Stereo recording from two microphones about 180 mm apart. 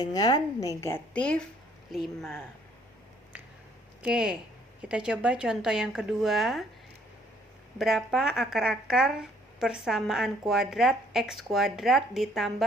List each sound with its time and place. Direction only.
0.0 s a woman's voice: 20° left (ahead or behind); by 2.4 s centre (ahead or behind)
4.0 s speech: 5° right (ahead or behind)
7.8 s speech: centre (ahead or behind)